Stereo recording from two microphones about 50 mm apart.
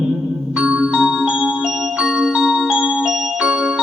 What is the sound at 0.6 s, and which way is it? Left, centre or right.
Music, right.